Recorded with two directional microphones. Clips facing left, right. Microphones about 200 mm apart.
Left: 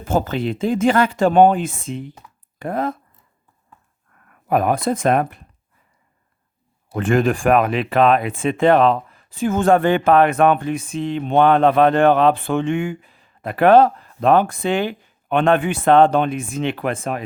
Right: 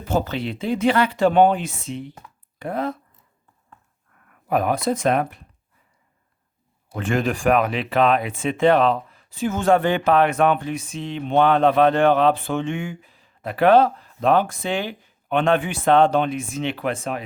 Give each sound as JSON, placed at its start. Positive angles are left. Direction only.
{"t": 0.0, "sound": "speech", "side_deg": 50}
{"t": 4.4, "sound": "speech", "side_deg": 50}
{"t": 6.9, "sound": "speech", "side_deg": 50}